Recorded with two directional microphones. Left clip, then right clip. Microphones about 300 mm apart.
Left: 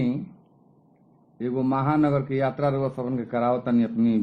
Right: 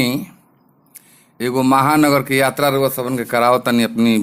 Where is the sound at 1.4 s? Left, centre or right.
Right.